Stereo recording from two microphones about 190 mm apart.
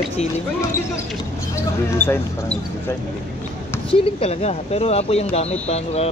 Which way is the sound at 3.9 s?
30° left (ahead or behind).